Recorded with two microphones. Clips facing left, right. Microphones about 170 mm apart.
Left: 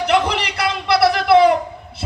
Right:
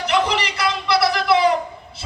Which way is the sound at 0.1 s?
55° left (ahead or behind).